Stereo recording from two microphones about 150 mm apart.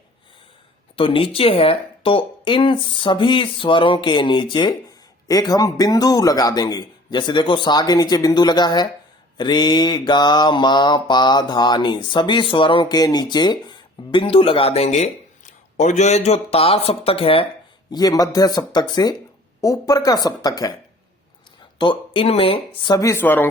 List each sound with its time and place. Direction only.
0.9 s speech: 35° left (ahead or behind)
17.9 s speech: 25° left (ahead or behind)
21.8 s speech: 35° left (ahead or behind)
23.0 s speech: 20° left (ahead or behind)